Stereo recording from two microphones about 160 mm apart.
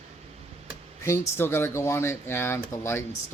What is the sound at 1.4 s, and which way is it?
Speech, 15° left (ahead or behind).